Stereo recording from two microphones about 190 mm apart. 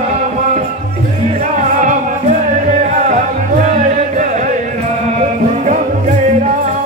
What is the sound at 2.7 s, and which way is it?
Music, 40° right (ahead or behind).